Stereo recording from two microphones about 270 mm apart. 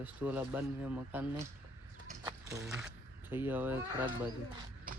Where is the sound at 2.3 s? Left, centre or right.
Centre.